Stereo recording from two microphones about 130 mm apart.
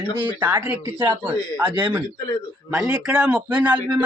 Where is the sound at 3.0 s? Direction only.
10° right (ahead or behind).